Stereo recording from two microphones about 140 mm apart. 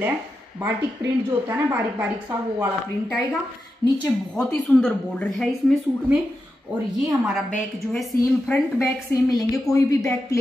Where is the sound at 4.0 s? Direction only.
5° left (ahead or behind).